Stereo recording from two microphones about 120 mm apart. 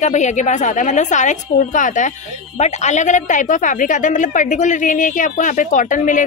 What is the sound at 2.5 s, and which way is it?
A woman's voice, 70° left (ahead or behind).